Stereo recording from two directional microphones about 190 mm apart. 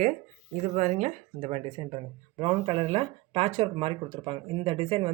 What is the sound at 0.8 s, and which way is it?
Speech, 40° right (ahead or behind).